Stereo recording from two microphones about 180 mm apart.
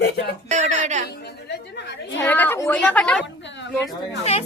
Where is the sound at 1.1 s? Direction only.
70° left (ahead or behind).